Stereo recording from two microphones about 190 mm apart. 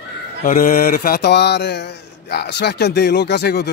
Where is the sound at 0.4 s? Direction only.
45° left (ahead or behind).